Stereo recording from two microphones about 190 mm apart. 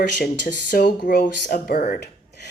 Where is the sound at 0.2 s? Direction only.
60° left (ahead or behind).